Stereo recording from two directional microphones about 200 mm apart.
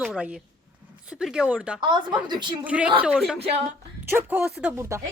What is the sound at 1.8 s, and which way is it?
Speech, 25° right (ahead or behind).